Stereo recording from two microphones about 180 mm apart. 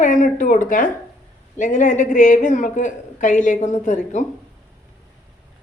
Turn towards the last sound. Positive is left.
turn(degrees=45)  # may be behind; listen again after turning